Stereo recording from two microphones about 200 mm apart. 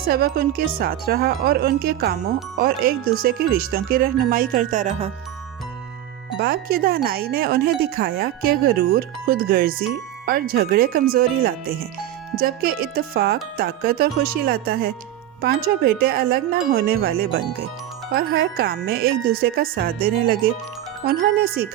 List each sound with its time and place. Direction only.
0.1 s speech: 50° right (ahead or behind)
6.4 s speech: 50° right (ahead or behind)